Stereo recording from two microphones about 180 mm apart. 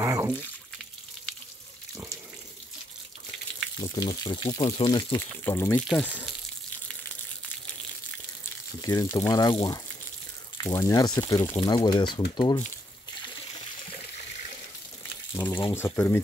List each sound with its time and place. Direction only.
0.0 s water: 15° right (ahead or behind)
3.9 s speech: 20° left (ahead or behind)
5.4 s speech: 15° left (ahead or behind)
8.8 s speech: 20° left (ahead or behind)
10.6 s speech: 15° left (ahead or behind)
15.3 s speech: 15° left (ahead or behind)